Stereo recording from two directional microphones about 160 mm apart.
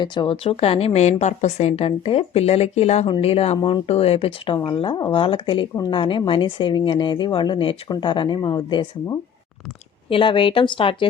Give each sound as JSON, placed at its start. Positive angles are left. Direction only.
{"t": 0.0, "sound": "speech", "side_deg": 30}